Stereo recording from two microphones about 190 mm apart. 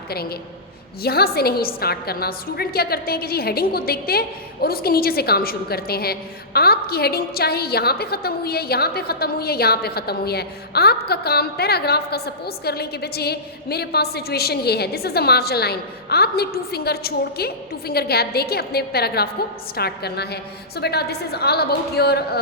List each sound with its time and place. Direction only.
0.1 s a woman's voice: 55° left (ahead or behind)